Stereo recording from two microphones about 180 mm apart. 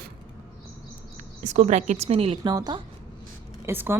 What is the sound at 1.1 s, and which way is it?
Speech, 40° right (ahead or behind).